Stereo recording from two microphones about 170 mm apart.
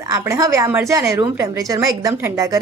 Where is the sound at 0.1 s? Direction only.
20° right (ahead or behind).